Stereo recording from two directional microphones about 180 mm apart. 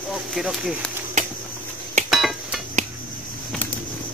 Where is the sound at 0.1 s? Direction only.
Centre (ahead or behind).